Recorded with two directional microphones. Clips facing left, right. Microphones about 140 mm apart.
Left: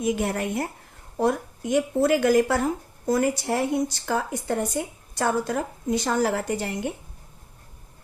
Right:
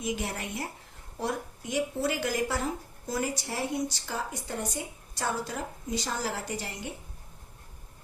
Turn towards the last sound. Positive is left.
turn(degrees=55)  # may be behind; listen again after turning